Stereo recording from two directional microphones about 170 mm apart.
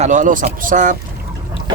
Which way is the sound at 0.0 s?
45° right (ahead or behind).